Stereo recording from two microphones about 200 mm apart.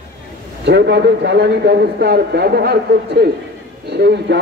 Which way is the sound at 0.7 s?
60° right (ahead or behind).